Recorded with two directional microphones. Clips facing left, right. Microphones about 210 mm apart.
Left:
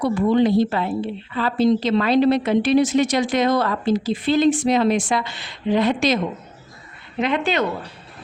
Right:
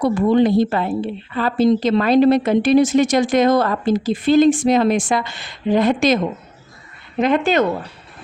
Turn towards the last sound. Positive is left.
turn(degrees=-45)  # may be behind; listen again after turning